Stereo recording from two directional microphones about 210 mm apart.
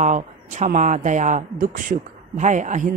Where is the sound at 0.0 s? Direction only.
35° right (ahead or behind).